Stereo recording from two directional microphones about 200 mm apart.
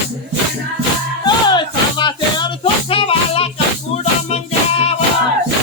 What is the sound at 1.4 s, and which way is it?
Music, 20° left (ahead or behind).